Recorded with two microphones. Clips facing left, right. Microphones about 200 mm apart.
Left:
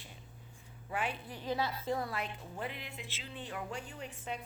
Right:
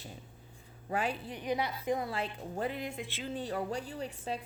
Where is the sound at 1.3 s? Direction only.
20° right (ahead or behind).